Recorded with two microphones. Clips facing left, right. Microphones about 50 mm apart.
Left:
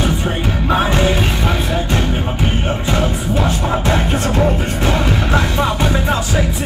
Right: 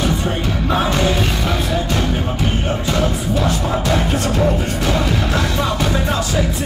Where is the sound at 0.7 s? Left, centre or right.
Left.